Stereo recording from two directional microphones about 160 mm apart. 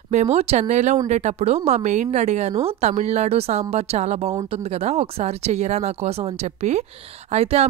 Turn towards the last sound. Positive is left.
turn(degrees=-40)  # may be behind; listen again after turning